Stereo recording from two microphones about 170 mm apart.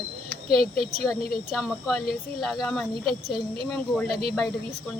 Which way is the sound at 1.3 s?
Centre (ahead or behind).